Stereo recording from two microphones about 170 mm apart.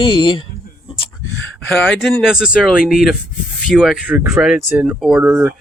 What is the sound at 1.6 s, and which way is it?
Speech, 5° left (ahead or behind).